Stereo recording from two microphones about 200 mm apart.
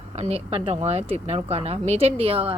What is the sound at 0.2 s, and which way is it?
Speech, 30° right (ahead or behind).